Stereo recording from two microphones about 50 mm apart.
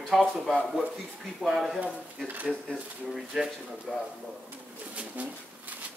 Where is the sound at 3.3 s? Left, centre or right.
Centre.